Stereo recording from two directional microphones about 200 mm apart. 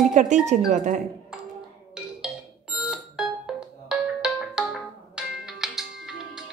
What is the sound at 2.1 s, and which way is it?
Music, 5° right (ahead or behind).